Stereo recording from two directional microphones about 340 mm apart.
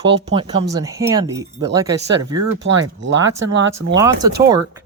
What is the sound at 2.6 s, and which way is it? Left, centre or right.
Speech, right.